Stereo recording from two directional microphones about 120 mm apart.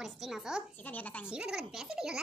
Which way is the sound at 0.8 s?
15° left (ahead or behind).